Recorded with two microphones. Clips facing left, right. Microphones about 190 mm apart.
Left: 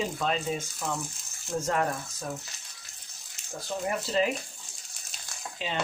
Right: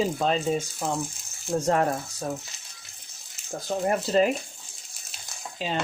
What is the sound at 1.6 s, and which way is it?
Speech, 35° right (ahead or behind).